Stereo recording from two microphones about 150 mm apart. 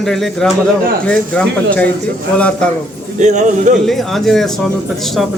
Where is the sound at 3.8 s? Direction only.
Centre (ahead or behind).